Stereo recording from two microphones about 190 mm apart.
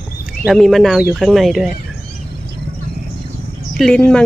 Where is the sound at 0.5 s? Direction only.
Centre (ahead or behind).